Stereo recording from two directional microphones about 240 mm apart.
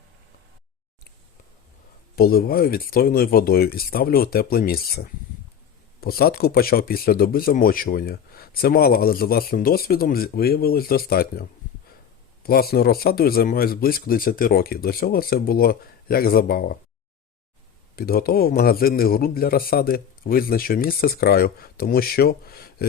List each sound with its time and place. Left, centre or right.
2.1 s speech: left
17.9 s speech: left